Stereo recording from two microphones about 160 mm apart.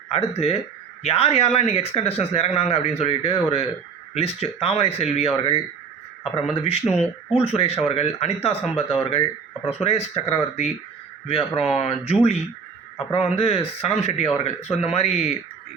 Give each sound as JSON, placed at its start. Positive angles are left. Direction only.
{"t": 0.1, "sound": "a man's voice", "side_deg": 40}